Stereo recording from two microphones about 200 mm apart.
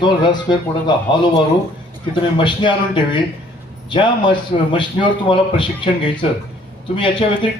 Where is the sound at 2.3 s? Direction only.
25° left (ahead or behind).